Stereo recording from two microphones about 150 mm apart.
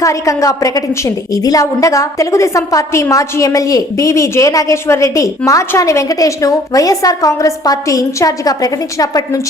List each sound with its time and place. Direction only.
0.0 s a woman's voice: 20° left (ahead or behind)